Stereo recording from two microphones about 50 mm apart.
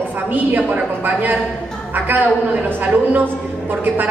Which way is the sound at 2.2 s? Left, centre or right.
Right.